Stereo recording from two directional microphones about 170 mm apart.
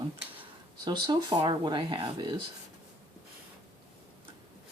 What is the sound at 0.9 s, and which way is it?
Speech, 25° right (ahead or behind).